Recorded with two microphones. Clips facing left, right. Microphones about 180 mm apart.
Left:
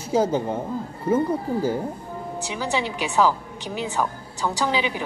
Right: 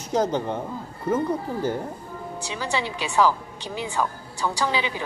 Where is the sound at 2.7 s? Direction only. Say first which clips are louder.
Left 1 dB; 15° left (ahead or behind).